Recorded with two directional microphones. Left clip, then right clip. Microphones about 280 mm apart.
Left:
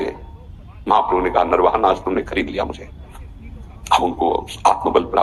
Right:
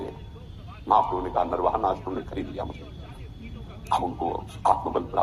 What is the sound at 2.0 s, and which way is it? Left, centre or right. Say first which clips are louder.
Speech: left 12 dB; left.